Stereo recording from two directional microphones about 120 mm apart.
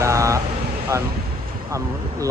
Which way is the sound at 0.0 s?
25° right (ahead or behind).